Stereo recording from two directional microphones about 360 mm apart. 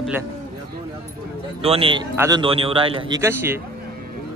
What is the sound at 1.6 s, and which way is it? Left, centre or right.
A man's voice, centre.